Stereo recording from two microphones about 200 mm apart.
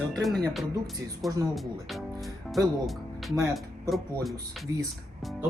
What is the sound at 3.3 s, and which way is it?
Speech, 15° right (ahead or behind).